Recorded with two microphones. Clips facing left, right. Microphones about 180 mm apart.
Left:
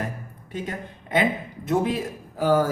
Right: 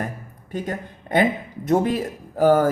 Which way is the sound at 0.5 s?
45° right (ahead or behind).